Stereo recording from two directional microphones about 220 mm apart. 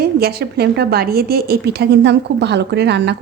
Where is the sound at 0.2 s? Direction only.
45° right (ahead or behind).